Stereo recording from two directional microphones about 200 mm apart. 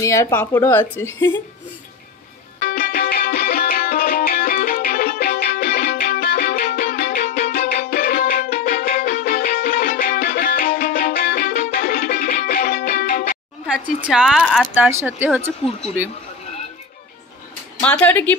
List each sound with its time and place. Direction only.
0.0 s a woman's voice: 15° left (ahead or behind)
2.6 s music: 45° left (ahead or behind)
14.0 s speech: centre (ahead or behind)
17.8 s a woman's voice: 5° left (ahead or behind)